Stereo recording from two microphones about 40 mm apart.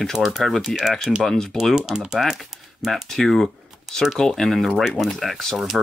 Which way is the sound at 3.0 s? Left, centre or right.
Centre.